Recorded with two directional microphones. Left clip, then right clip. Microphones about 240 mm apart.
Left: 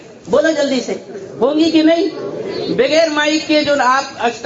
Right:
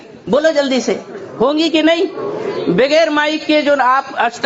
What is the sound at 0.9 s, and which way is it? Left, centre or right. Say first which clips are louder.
A man's voice: right 4 dB; right.